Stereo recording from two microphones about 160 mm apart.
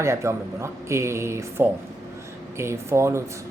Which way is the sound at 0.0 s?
15° right (ahead or behind).